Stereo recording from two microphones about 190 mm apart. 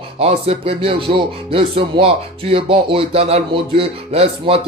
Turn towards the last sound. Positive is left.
turn(degrees=-30)  # may be behind; listen again after turning